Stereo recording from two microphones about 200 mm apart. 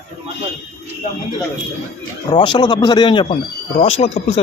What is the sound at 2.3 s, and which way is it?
Speech, 20° left (ahead or behind).